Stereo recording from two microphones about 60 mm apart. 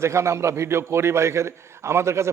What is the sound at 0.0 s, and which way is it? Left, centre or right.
A man's voice, right.